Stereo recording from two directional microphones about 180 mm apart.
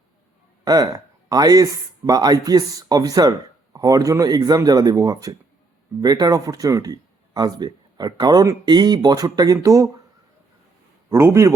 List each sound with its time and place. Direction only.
0.6 s speech: 20° right (ahead or behind)
11.1 s a man's voice: 15° right (ahead or behind)